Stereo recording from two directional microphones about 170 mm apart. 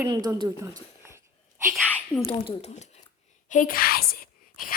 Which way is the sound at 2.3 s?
30° left (ahead or behind).